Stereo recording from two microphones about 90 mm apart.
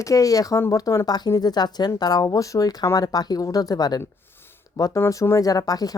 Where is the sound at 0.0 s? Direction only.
40° left (ahead or behind).